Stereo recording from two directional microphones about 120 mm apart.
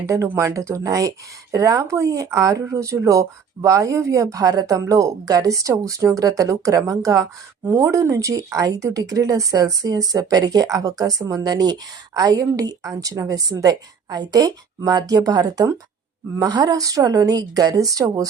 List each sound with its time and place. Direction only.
0.0 s a woman's voice: 25° right (ahead or behind)